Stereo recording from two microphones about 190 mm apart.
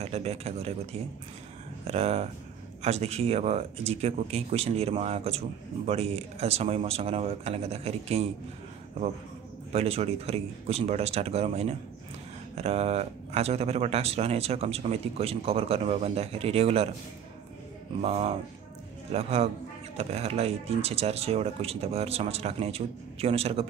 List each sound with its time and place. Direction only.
0.0 s speech: 35° right (ahead or behind)
1.9 s speech: 35° right (ahead or behind)
9.7 s speech: 30° right (ahead or behind)
18.0 s speech: 35° right (ahead or behind)